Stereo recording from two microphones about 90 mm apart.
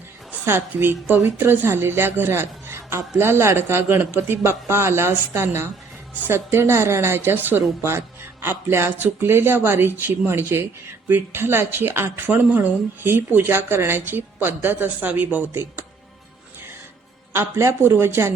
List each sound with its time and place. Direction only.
0.3 s a woman's voice: 25° right (ahead or behind)
17.3 s a woman's voice: 30° right (ahead or behind)